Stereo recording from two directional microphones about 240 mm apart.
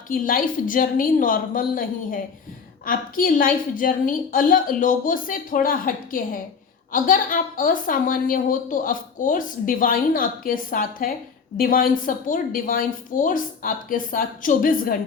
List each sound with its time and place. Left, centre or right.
0.1 s a woman's voice: left